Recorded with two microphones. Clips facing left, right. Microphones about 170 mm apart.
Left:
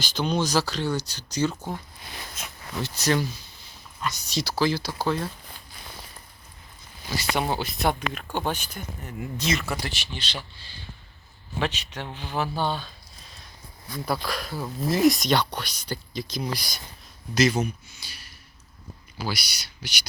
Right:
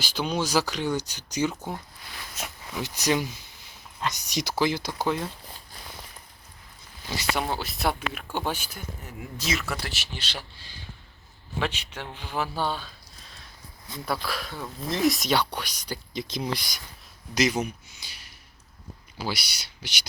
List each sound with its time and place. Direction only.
0.0 s speech: 5° right (ahead or behind)
2.7 s speech: 15° right (ahead or behind)
7.3 s speech: centre (ahead or behind)
16.3 s speech: 25° right (ahead or behind)